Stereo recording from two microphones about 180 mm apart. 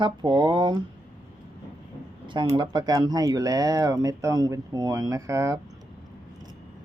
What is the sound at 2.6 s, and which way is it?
Speech, 20° right (ahead or behind).